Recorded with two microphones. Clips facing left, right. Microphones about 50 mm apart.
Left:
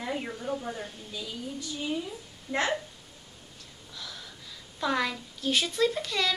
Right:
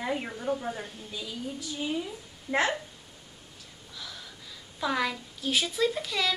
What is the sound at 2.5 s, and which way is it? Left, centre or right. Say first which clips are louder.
Speech: right 3 dB; centre.